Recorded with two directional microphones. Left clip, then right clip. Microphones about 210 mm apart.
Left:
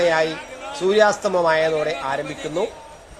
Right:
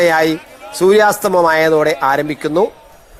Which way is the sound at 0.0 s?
35° right (ahead or behind).